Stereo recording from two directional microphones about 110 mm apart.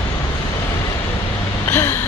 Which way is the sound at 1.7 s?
20° left (ahead or behind).